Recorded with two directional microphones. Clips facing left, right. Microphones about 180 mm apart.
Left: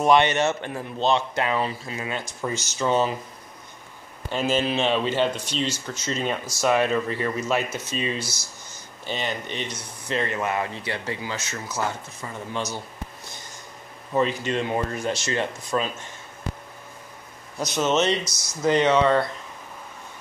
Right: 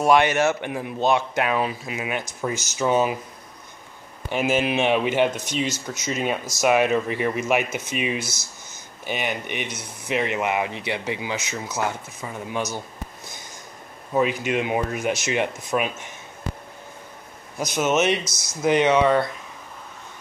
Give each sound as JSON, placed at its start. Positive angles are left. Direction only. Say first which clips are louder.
{"t": 0.0, "sound": "speech", "louder": "right 1 dB", "side_deg": -5}
{"t": 4.3, "sound": "speech", "louder": "right 2 dB", "side_deg": -15}
{"t": 14.1, "sound": "speech", "louder": "right 1 dB", "side_deg": -10}
{"t": 17.7, "sound": "speech", "louder": "right 1 dB", "side_deg": -10}
{"t": 18.2, "sound": "speech", "louder": "even", "side_deg": 15}
{"t": 18.6, "sound": "speech", "louder": "right 1 dB", "side_deg": -15}